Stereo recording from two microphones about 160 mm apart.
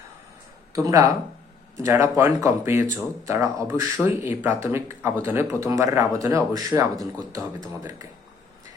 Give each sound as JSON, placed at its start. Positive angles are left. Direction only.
{"t": 0.7, "sound": "speech", "side_deg": -20}